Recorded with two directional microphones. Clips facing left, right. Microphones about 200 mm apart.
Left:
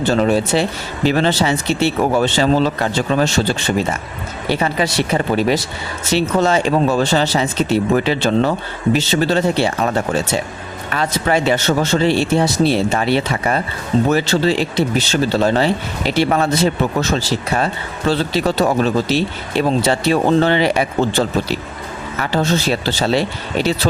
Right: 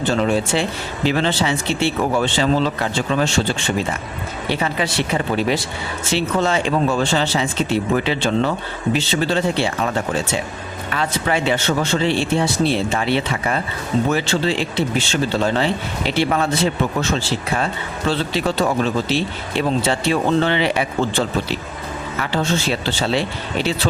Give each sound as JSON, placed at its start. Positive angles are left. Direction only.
{"t": 0.0, "sound": "speech", "side_deg": 40}
{"t": 4.6, "sound": "speech", "side_deg": 40}